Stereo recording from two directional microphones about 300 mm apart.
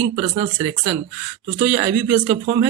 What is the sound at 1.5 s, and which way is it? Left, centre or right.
Speech, centre.